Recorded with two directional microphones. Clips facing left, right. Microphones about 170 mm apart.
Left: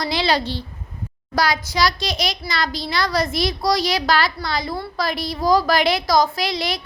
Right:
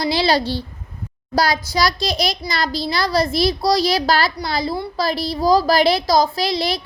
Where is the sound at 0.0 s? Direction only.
35° right (ahead or behind).